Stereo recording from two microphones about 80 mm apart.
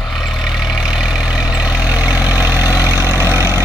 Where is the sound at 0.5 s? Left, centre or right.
Centre.